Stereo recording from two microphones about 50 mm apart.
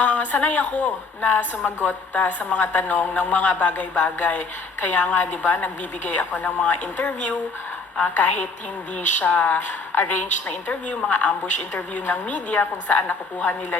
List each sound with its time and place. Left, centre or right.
0.0 s a woman's voice: left
1.6 s a woman's voice: left
2.1 s a woman's voice: left
9.9 s a woman's voice: left
10.7 s a woman's voice: left